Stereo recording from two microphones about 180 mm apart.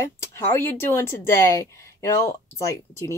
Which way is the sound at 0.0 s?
10° left (ahead or behind).